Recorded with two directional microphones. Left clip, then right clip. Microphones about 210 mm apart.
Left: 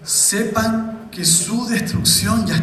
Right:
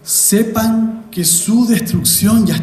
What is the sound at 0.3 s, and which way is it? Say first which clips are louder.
A man's voice: right 5 dB; 55° right (ahead or behind).